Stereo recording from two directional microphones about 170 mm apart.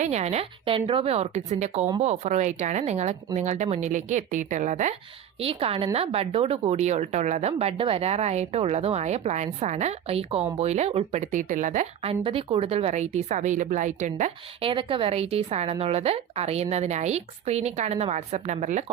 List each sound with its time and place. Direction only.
0.0 s speech: 40° right (ahead or behind)
5.4 s speech: 35° right (ahead or behind)
12.2 s speech: 35° right (ahead or behind)
14.6 s speech: 30° right (ahead or behind)